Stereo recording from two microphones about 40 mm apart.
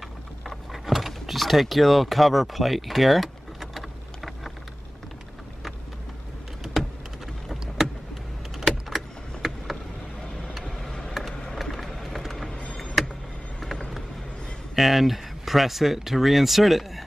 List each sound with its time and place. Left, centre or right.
0.8 s power windows: centre
6.6 s typing: centre
8.5 s vehicle: centre
10.9 s a sound: centre
11.5 s a sound: centre
13.6 s vehicle: centre
14.8 s speech: centre